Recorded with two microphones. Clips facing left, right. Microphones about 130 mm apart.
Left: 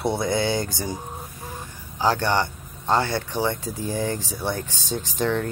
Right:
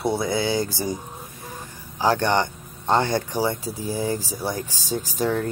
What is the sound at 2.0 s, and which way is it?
Speech, 15° right (ahead or behind).